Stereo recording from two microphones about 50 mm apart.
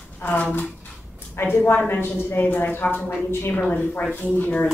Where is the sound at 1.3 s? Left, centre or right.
Left.